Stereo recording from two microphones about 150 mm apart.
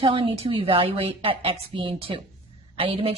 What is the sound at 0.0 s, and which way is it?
A woman's voice, 35° right (ahead or behind).